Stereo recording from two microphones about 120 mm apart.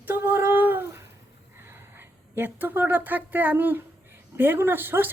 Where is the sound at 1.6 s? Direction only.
20° right (ahead or behind).